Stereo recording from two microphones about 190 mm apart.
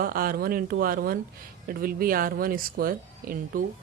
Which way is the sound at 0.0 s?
50° right (ahead or behind).